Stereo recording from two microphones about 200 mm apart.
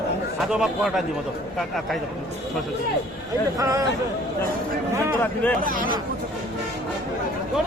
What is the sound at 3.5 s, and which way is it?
Speech, 15° right (ahead or behind).